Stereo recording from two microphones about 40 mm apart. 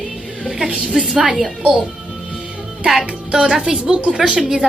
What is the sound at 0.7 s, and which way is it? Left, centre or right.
Speech, right.